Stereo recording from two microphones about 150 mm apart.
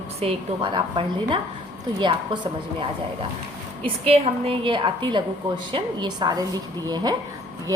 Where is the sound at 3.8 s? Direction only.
40° right (ahead or behind).